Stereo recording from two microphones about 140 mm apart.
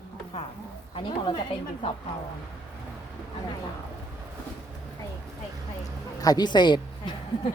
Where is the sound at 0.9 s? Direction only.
35° left (ahead or behind).